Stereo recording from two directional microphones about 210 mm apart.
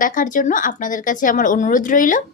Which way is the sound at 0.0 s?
40° left (ahead or behind).